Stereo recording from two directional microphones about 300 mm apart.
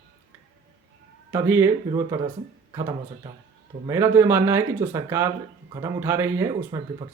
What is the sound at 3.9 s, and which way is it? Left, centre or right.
Speech, centre.